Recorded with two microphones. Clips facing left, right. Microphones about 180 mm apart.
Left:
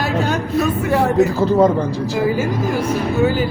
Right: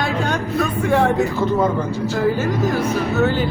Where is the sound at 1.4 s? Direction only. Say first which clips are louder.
Left 4 dB; 35° left (ahead or behind).